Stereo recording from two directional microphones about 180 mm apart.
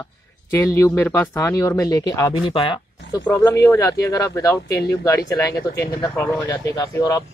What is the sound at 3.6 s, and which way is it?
Speech, 15° left (ahead or behind).